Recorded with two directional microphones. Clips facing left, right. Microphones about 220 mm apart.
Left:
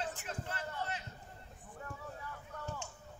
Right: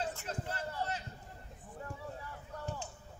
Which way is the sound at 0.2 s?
35° right (ahead or behind).